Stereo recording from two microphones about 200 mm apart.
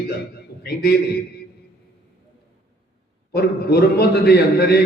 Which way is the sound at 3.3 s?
55° left (ahead or behind).